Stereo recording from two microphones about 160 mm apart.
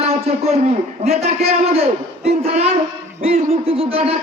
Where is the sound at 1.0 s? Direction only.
40° right (ahead or behind).